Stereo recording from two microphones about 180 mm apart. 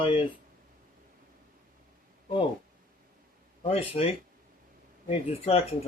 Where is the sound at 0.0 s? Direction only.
30° left (ahead or behind).